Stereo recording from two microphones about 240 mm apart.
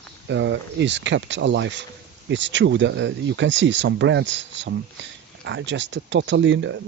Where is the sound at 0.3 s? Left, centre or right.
Right.